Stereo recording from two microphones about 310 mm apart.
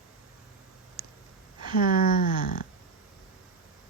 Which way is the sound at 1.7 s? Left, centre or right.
Left.